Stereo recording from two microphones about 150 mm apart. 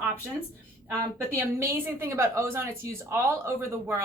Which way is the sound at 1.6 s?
15° right (ahead or behind).